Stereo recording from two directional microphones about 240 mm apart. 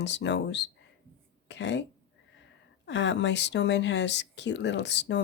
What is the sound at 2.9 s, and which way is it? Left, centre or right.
Speech, left.